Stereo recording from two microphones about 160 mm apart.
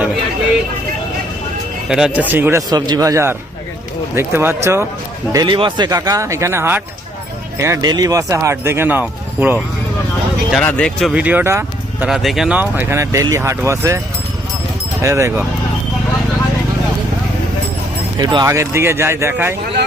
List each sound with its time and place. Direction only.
1.9 s speech: 5° right (ahead or behind)
5.3 s speech: 25° right (ahead or behind); by 9.6 s 10° right (ahead or behind)
10.5 s speech: 5° left (ahead or behind)
11.1 s speech: 10° right (ahead or behind)
12.0 s speech: centre (ahead or behind); by 14.0 s 20° right (ahead or behind)
15.0 s speech: 15° right (ahead or behind)
18.2 s speech: 30° right (ahead or behind)
18.4 s speech: 15° right (ahead or behind)